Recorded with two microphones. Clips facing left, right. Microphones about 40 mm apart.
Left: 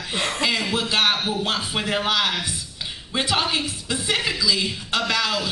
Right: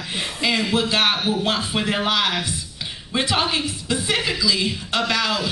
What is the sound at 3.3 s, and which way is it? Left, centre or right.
Speech, right.